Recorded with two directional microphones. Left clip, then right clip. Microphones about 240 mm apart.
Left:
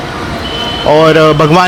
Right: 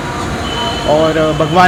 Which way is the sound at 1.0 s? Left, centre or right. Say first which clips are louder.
Left 6 dB; left.